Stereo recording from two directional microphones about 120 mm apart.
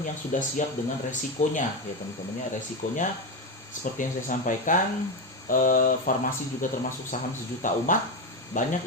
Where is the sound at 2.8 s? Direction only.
90° left.